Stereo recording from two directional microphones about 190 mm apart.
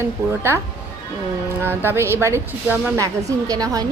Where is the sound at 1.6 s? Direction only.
10° right (ahead or behind).